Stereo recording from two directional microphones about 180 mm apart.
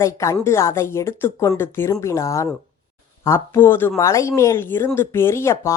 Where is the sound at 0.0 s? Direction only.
15° left (ahead or behind).